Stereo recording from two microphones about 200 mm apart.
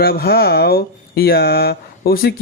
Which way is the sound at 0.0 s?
50° left (ahead or behind).